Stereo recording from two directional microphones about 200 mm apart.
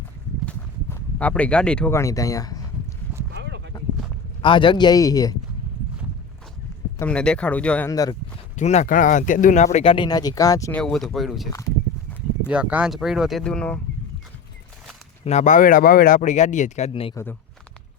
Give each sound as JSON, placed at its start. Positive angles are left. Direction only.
{"t": 0.4, "sound": "speech", "side_deg": 5}
{"t": 3.3, "sound": "a sound", "side_deg": -60}
{"t": 4.4, "sound": "speech", "side_deg": 25}
{"t": 7.0, "sound": "speech", "side_deg": 5}
{"t": 8.5, "sound": "speech", "side_deg": 35}
{"t": 9.7, "sound": "speech", "side_deg": 25}
{"t": 10.8, "sound": "speech", "side_deg": 5}
{"t": 12.5, "sound": "speech", "side_deg": -5}
{"t": 15.2, "sound": "speech", "side_deg": 35}